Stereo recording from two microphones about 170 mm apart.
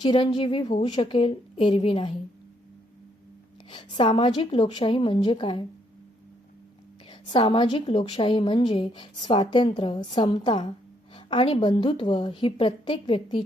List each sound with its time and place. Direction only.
0.0 s a woman's voice: 25° left (ahead or behind)
3.7 s a woman's voice: 30° left (ahead or behind)
7.1 s a woman's voice: 30° left (ahead or behind)